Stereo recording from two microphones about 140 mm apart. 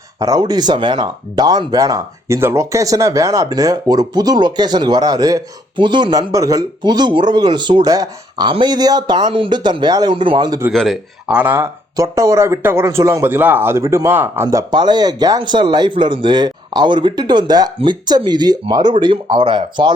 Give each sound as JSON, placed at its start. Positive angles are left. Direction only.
{"t": 0.2, "sound": "speech", "side_deg": -25}
{"t": 10.7, "sound": "speech", "side_deg": 0}